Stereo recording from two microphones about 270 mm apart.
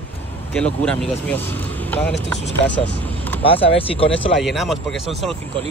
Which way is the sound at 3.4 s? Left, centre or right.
Left.